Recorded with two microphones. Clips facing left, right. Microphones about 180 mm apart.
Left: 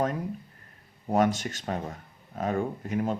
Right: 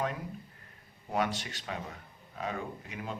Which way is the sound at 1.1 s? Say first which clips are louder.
Left 8 dB; 45° left (ahead or behind).